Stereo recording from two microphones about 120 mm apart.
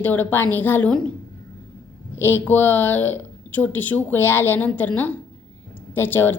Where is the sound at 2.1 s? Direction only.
20° left (ahead or behind).